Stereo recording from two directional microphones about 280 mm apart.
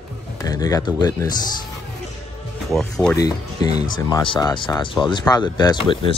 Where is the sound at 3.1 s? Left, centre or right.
Centre.